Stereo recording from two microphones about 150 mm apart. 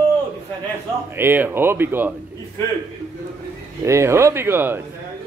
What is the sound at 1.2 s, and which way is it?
Speech, 15° right (ahead or behind).